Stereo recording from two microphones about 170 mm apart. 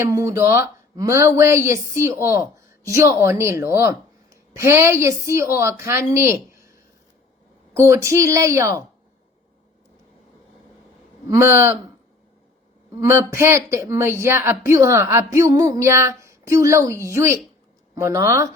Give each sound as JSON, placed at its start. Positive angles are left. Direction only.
{"t": 0.0, "sound": "a woman's voice", "side_deg": -15}
{"t": 7.7, "sound": "a woman's voice", "side_deg": -15}
{"t": 11.3, "sound": "a woman's voice", "side_deg": -15}
{"t": 13.0, "sound": "a woman's voice", "side_deg": -15}